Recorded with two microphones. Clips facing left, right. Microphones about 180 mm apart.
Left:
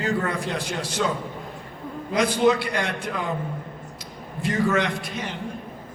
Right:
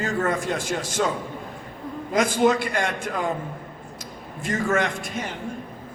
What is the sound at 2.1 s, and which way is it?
A man's voice, 45° right (ahead or behind).